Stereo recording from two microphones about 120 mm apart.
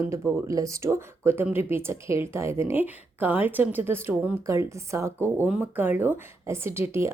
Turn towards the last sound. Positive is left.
turn(degrees=-20)  # may be behind; listen again after turning